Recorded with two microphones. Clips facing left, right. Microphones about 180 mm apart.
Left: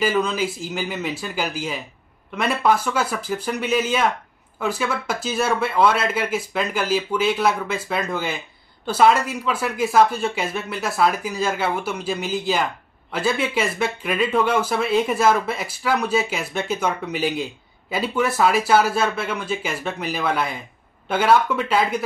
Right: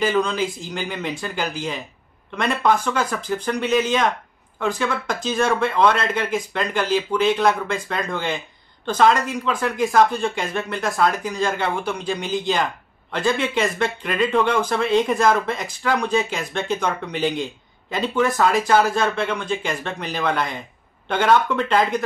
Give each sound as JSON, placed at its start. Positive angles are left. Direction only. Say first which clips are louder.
{"t": 0.0, "sound": "speech", "louder": "right 1 dB", "side_deg": 5}